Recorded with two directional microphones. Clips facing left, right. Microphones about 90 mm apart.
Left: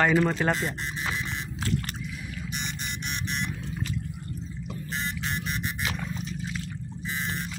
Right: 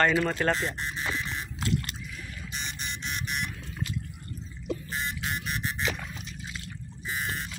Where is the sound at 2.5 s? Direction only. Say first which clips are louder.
Even; 20° left (ahead or behind).